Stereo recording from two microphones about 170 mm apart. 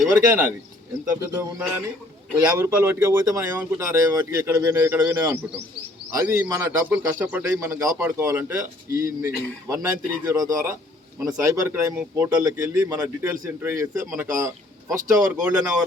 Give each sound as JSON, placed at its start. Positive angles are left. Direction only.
{"t": 0.1, "sound": "a man's voice", "side_deg": -10}